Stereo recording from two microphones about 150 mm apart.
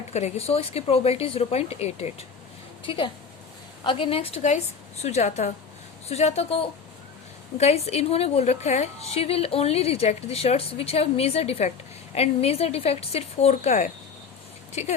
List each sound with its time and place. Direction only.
0.1 s a woman's voice: 45° left (ahead or behind)
2.8 s a woman's voice: 35° left (ahead or behind)